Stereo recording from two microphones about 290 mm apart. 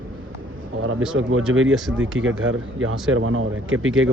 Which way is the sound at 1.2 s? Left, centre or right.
Right.